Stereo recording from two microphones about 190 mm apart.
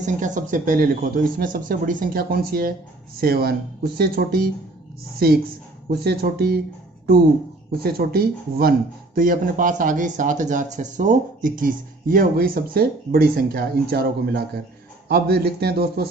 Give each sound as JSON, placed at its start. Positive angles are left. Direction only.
{"t": 0.0, "sound": "speech", "side_deg": -40}
{"t": 7.9, "sound": "speech", "side_deg": -55}